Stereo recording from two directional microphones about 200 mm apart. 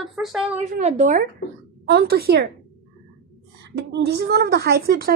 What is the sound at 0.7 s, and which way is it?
Speech, 35° right (ahead or behind).